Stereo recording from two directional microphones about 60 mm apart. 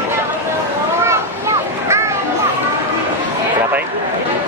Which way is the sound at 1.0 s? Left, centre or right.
Right.